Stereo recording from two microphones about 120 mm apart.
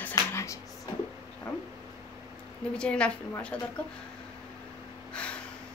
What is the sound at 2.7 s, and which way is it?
Speech, 10° left (ahead or behind).